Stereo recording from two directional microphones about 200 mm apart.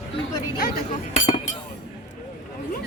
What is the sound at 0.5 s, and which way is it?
Speech, 50° left (ahead or behind).